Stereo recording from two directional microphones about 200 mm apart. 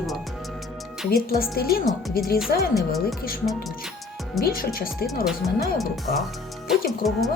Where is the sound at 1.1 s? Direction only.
50° left (ahead or behind).